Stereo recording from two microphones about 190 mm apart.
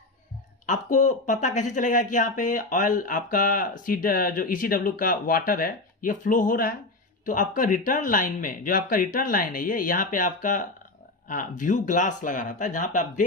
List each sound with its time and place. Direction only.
0.7 s speech: 40° left (ahead or behind)